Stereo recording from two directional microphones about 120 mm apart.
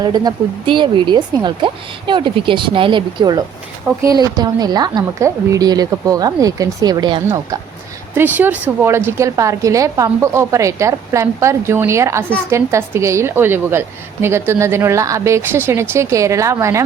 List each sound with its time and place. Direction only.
0.0 s speech: 35° right (ahead or behind)
8.1 s a woman's voice: 15° right (ahead or behind)